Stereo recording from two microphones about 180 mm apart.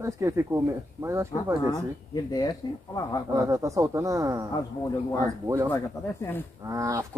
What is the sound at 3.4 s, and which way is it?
Speech, 15° right (ahead or behind).